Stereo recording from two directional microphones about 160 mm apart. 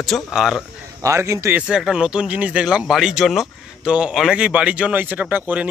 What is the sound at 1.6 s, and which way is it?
Speech, 5° right (ahead or behind).